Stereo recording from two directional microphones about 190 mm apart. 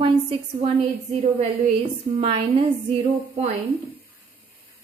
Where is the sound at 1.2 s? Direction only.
40° right (ahead or behind).